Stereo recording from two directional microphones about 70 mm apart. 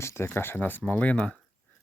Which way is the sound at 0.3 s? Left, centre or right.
Left.